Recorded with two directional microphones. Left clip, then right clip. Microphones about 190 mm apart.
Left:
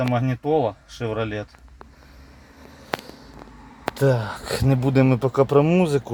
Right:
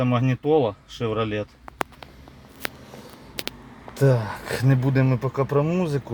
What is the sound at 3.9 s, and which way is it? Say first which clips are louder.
Speech: even; 5° right (ahead or behind).